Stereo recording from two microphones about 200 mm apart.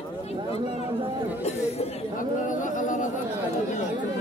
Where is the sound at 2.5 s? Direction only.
40° left (ahead or behind).